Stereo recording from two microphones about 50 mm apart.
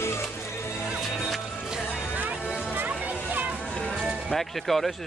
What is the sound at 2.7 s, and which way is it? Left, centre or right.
Music, right.